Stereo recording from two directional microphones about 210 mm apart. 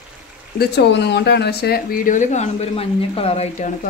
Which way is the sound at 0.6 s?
55° left (ahead or behind).